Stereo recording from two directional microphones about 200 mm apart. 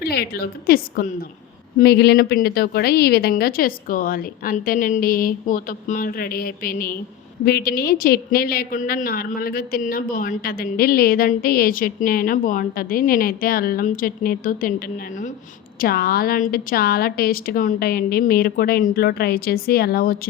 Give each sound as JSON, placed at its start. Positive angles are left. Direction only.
{"t": 0.0, "sound": "a woman's voice", "side_deg": 50}
{"t": 15.8, "sound": "a woman's voice", "side_deg": 50}